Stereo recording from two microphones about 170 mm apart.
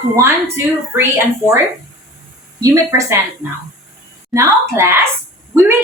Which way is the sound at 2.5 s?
20° right (ahead or behind).